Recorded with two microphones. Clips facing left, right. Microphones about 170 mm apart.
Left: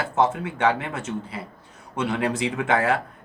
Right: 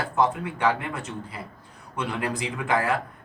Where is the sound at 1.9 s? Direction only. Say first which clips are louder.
Left 4 dB; 25° left (ahead or behind).